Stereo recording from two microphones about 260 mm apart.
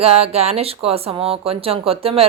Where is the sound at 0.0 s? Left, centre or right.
Right.